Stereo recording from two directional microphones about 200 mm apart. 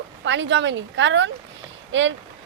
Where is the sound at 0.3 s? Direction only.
65° right (ahead or behind).